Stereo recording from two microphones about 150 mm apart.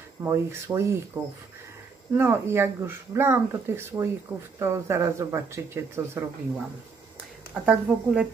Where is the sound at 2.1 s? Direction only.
15° right (ahead or behind).